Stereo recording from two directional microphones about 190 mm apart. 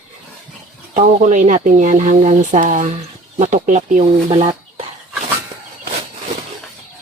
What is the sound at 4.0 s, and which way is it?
Speech, 30° right (ahead or behind).